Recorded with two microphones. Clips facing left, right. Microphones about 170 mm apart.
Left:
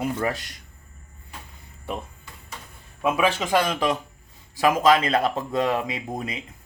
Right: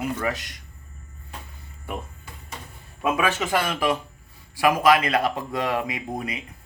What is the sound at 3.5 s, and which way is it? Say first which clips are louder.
Speech: left 1 dB; 20° left (ahead or behind).